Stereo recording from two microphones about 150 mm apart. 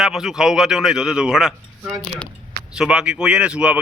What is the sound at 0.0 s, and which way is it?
A man's voice, 5° right (ahead or behind).